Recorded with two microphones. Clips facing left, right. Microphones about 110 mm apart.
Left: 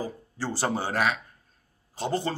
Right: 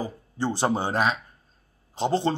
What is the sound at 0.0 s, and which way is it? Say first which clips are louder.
A man's voice: right 4 dB; 20° right (ahead or behind).